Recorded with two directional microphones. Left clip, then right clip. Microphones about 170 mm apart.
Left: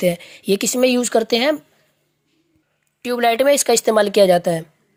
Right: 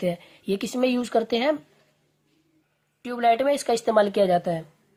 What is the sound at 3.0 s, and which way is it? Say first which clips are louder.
A woman's voice: left 5 dB; 35° left (ahead or behind).